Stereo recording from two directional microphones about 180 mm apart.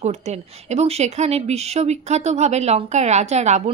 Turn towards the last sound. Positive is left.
turn(degrees=-40)  # may be behind; listen again after turning